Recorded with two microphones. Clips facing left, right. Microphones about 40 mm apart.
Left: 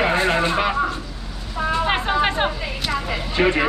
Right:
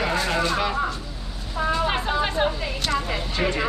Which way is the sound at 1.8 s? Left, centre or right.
Left.